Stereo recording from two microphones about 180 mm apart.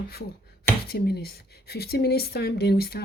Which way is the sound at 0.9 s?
60° left (ahead or behind).